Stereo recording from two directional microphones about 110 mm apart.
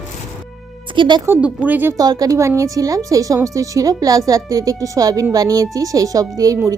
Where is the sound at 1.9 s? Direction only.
35° right (ahead or behind).